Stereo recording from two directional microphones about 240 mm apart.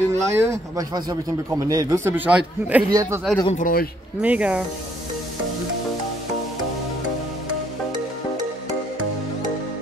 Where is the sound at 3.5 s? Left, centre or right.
Left.